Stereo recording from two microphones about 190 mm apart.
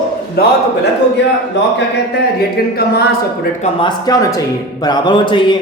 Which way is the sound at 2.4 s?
55° left (ahead or behind).